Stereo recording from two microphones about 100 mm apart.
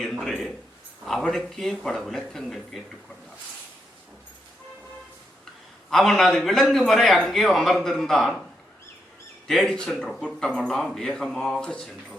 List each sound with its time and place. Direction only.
0.0 s a sound: centre (ahead or behind)
1.0 s a man's voice: centre (ahead or behind)
5.9 s a man's voice: 5° left (ahead or behind)
9.5 s a man's voice: 5° left (ahead or behind)